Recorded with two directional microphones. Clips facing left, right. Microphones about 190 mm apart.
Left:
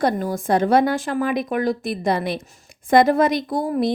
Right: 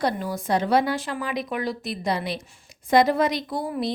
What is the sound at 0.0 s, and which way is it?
A woman's voice, 50° left (ahead or behind).